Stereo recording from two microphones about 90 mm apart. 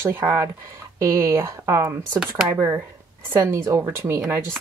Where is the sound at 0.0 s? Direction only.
25° right (ahead or behind).